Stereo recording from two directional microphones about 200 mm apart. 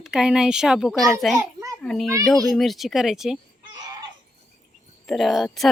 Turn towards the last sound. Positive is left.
turn(degrees=0)  # may be behind; listen again after turning